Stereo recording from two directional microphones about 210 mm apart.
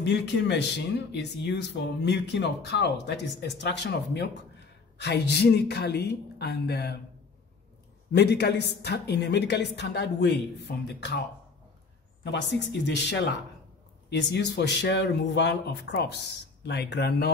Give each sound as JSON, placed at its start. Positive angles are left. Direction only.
{"t": 0.0, "sound": "a woman's voice", "side_deg": 55}
{"t": 8.1, "sound": "a woman's voice", "side_deg": 50}
{"t": 12.3, "sound": "a woman's voice", "side_deg": 55}